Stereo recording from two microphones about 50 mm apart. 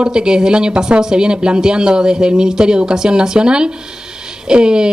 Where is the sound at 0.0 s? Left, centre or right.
Centre.